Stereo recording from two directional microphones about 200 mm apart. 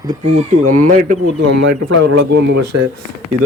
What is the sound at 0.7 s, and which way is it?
Speech, 40° right (ahead or behind).